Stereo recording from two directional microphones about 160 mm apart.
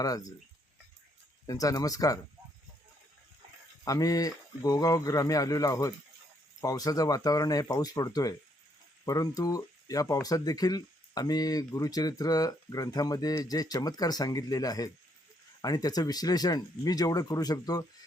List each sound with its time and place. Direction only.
0.0 s speech: 25° left (ahead or behind)
1.5 s speech: 20° left (ahead or behind)
3.8 s speech: 20° left (ahead or behind)